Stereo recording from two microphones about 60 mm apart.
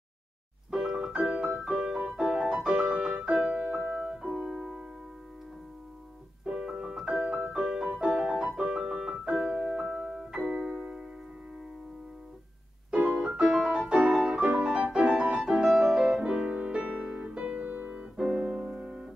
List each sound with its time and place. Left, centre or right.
0.7 s music: centre
6.4 s music: centre
8.9 s piano: centre
9.6 s music: centre
10.3 s keyboard: centre
13.4 s piano: centre
14.6 s music: centre
16.2 s music: centre
17.6 s piano: right
18.1 s piano: centre